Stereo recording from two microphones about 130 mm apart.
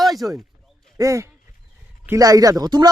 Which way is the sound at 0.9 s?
25° right (ahead or behind).